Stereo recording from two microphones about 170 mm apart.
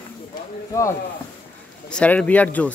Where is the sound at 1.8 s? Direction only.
5° left (ahead or behind).